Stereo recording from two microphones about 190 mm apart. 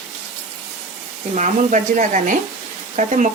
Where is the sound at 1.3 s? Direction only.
40° right (ahead or behind).